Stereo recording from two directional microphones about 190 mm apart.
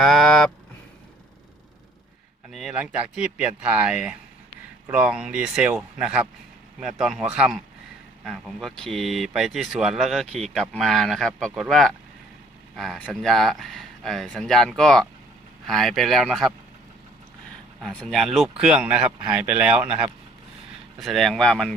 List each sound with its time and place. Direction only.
0.0 s a sound: centre (ahead or behind)
2.5 s speech: centre (ahead or behind)
17.8 s speech: 5° left (ahead or behind)
21.0 s speech: centre (ahead or behind)